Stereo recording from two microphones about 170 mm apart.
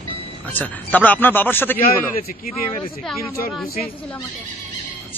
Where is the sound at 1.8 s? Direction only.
60° left (ahead or behind).